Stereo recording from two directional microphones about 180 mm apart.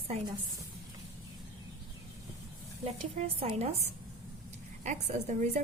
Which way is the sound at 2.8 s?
35° right (ahead or behind).